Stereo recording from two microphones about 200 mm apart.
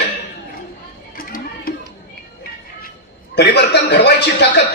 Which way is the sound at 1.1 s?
45° left (ahead or behind).